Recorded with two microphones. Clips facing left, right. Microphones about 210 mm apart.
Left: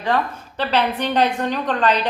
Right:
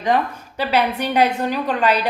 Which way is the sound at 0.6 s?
10° right (ahead or behind).